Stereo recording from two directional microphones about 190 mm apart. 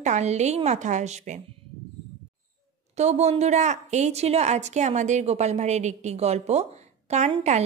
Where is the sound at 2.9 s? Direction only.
35° right (ahead or behind).